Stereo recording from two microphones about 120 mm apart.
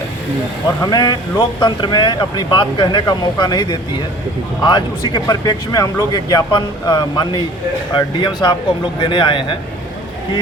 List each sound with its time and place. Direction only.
0.8 s speech: 35° left (ahead or behind)